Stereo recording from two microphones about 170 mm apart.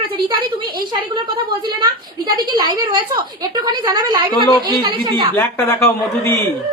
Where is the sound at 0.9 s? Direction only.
25° right (ahead or behind).